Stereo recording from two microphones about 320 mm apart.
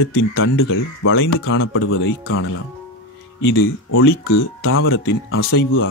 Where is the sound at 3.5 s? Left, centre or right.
Left.